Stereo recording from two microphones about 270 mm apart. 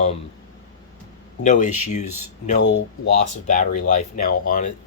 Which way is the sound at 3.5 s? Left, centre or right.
Left.